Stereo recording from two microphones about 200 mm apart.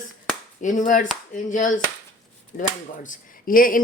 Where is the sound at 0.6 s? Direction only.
40° left (ahead or behind).